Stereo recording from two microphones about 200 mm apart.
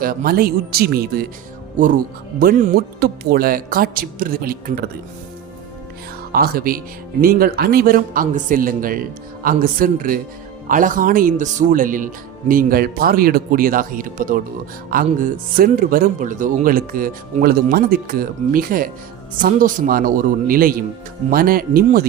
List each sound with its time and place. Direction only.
0.0 s speech: 45° right (ahead or behind)
2.4 s speech: 45° right (ahead or behind)
6.3 s speech: 50° right (ahead or behind)